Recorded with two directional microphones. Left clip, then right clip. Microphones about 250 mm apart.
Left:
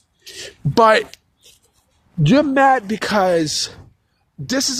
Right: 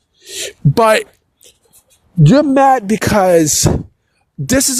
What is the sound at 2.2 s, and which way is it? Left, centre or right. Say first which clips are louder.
Speech: right 4 dB; right.